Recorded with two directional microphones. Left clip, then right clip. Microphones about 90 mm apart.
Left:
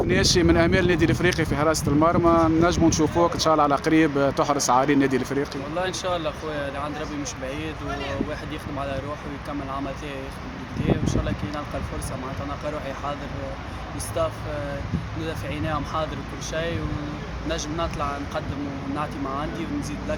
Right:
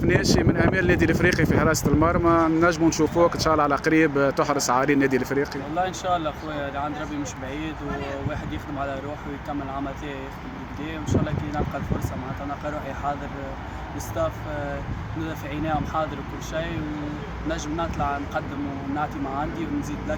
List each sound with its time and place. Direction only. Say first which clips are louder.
0.1 s speech: left 1 dB; 5° left (ahead or behind); by 6.7 s 20° left (ahead or behind)
11.0 s speech: right 1 dB; 10° left (ahead or behind)
14.2 s speech: left 1 dB; 10° left (ahead or behind)